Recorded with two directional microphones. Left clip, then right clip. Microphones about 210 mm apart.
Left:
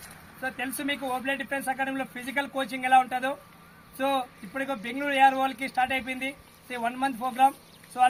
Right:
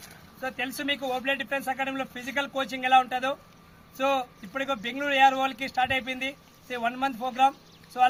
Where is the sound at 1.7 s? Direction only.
20° right (ahead or behind).